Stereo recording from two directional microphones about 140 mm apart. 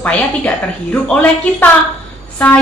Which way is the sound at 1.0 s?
10° left (ahead or behind).